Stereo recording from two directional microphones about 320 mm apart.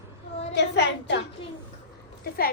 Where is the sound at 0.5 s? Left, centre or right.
Left.